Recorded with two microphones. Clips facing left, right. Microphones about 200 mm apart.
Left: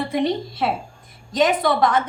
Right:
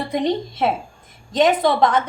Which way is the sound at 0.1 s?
20° right (ahead or behind).